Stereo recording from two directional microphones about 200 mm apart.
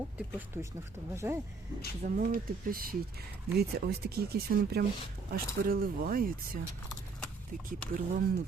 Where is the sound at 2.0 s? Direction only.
45° right (ahead or behind).